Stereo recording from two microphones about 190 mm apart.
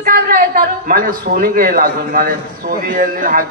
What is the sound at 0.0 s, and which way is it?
A man's voice, 50° right (ahead or behind).